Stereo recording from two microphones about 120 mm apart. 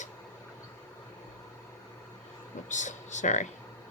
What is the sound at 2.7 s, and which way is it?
Speech, 90° left.